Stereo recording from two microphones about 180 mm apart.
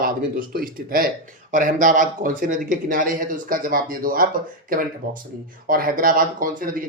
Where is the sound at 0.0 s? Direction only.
55° right (ahead or behind).